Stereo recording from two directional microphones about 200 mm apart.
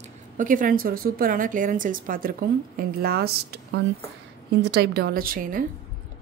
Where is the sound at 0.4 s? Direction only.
40° right (ahead or behind).